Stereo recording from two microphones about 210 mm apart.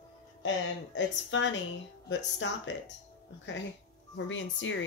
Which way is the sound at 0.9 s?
60° left (ahead or behind).